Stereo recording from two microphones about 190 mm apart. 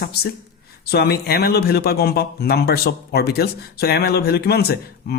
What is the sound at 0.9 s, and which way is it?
Speech, 55° left (ahead or behind).